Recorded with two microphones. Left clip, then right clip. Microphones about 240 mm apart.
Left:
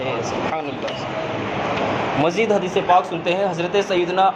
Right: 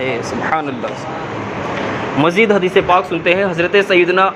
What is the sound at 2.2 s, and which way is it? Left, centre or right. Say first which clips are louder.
A man's voice: right 8 dB; right.